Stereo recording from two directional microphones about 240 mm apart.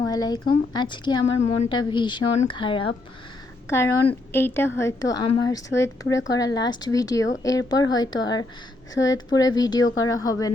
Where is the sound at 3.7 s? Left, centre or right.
Centre.